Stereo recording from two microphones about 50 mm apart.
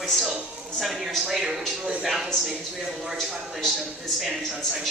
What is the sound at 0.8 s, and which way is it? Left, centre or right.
Speech, centre.